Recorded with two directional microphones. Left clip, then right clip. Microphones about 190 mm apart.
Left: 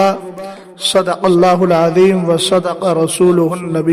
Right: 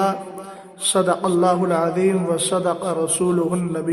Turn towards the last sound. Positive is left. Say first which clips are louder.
# left 7 dB
turn(degrees=40)  # may be behind; listen again after turning